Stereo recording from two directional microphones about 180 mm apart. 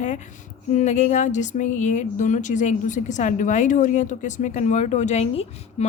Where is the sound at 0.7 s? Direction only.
40° left (ahead or behind).